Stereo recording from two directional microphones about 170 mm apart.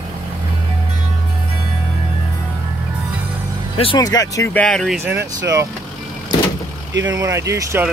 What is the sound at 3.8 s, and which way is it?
Speech, 25° left (ahead or behind).